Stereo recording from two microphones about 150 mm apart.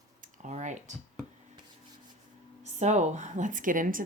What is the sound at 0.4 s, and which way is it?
Computer keyboard, 55° right (ahead or behind).